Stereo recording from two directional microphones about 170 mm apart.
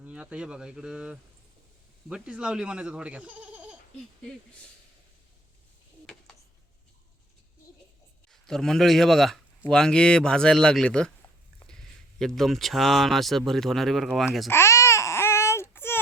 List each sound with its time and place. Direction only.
0.0 s speech: 5° right (ahead or behind)
8.3 s a man's voice: centre (ahead or behind)
12.2 s speech: centre (ahead or behind)
14.5 s baby cry: 15° left (ahead or behind)